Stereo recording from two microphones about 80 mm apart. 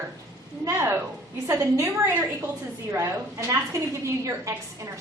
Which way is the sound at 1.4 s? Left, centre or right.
Right.